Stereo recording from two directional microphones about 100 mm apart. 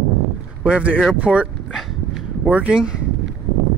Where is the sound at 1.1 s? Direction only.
15° right (ahead or behind).